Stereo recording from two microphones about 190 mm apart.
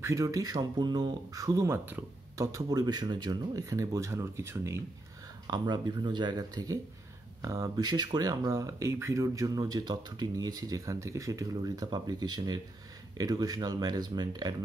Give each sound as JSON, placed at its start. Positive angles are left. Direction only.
{"t": 0.0, "sound": "speech", "side_deg": -15}